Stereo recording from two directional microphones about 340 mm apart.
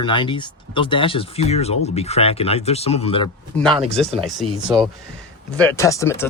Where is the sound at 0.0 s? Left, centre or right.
Centre.